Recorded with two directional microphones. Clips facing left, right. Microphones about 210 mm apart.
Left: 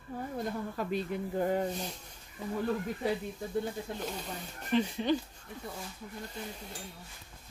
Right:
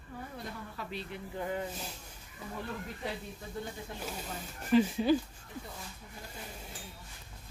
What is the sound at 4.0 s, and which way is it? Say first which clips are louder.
Speech: left 2 dB; 5° right (ahead or behind).